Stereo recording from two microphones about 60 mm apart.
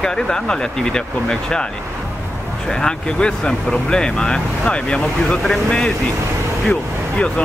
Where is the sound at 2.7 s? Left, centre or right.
Centre.